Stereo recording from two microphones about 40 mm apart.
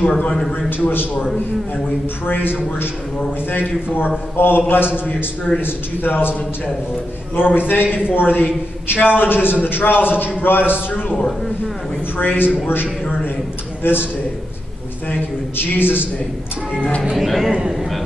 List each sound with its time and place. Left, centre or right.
0.8 s a man's voice: left
2.2 s a man's voice: left
7.3 s a man's voice: left
12.2 s a man's voice: left
13.8 s a man's voice: left
15.0 s a man's voice: left
17.2 s a man's voice: centre
17.5 s a man's voice: centre